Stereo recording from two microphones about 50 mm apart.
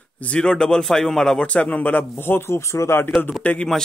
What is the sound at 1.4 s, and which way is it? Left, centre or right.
Speech, left.